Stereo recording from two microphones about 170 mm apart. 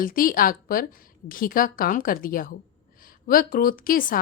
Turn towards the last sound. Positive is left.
turn(degrees=55)  # may be behind; listen again after turning